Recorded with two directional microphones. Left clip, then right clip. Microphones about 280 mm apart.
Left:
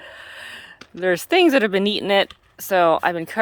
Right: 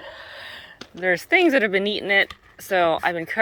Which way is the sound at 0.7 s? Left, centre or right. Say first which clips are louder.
Left 1 dB; right.